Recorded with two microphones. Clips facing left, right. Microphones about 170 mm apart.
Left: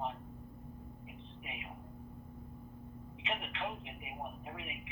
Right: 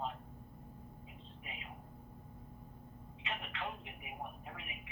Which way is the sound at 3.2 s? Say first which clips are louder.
Left 3 dB; 20° left (ahead or behind).